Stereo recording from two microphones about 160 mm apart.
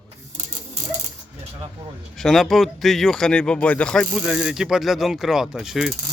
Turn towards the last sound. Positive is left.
turn(degrees=0)  # may be behind; listen again after turning